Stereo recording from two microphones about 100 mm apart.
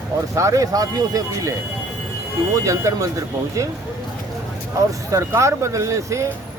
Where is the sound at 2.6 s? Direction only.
30° right (ahead or behind).